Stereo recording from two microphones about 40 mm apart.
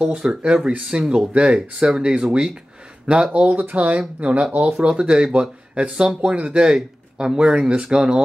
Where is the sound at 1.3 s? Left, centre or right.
Right.